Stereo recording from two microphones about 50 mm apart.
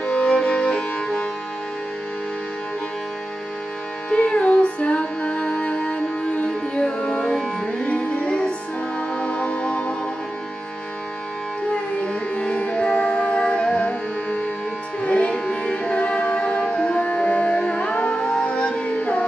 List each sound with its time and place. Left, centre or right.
0.0 s music: left
4.1 s music: left
11.7 s music: left
15.0 s music: left